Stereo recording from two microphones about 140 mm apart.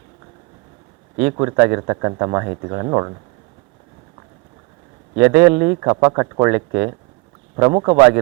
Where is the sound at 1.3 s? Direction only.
25° right (ahead or behind).